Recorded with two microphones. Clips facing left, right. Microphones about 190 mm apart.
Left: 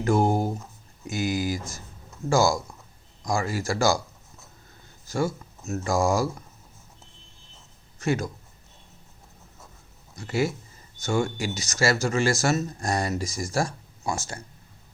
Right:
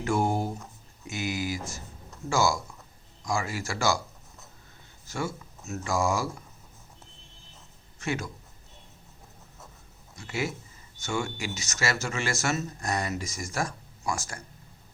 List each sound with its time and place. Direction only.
0.0 s speech: 40° left (ahead or behind)
5.0 s speech: 35° left (ahead or behind)
7.9 s speech: 40° left (ahead or behind)
10.2 s speech: 35° left (ahead or behind)